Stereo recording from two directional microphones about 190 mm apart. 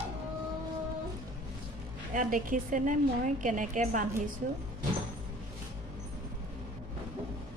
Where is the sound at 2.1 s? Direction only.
45° right (ahead or behind).